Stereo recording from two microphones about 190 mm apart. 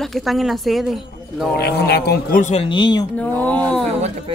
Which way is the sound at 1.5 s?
60° left (ahead or behind).